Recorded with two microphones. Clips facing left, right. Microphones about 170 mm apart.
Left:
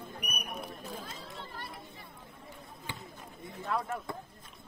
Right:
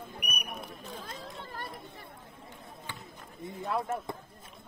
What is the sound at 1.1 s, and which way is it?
Chatter, 45° right (ahead or behind).